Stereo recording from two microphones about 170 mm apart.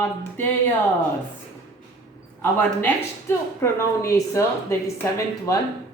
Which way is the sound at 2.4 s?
10° left (ahead or behind).